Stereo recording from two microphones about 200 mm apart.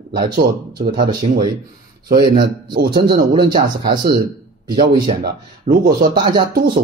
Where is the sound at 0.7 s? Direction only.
45° right (ahead or behind).